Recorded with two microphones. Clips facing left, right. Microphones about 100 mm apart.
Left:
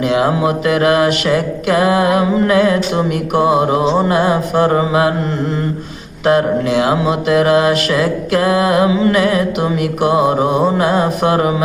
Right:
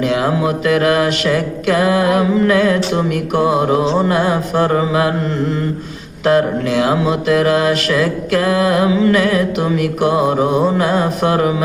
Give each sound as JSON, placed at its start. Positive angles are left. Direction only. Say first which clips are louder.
{"t": 0.0, "sound": "mantra", "louder": "left 2 dB", "side_deg": 20}
{"t": 6.2, "sound": "mantra", "louder": "left 1 dB", "side_deg": 20}